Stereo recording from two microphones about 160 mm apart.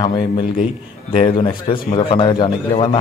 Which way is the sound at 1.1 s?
30° left (ahead or behind).